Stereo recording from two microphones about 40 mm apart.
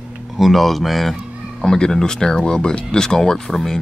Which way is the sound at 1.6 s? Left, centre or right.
Centre.